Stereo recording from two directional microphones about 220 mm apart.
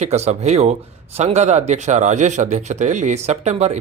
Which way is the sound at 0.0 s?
30° right (ahead or behind).